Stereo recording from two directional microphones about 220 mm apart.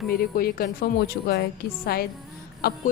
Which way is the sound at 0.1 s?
45° left (ahead or behind).